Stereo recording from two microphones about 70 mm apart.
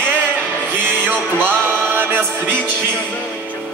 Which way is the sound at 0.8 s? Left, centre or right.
Right.